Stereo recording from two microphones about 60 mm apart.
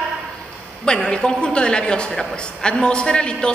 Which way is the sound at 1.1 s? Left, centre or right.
Centre.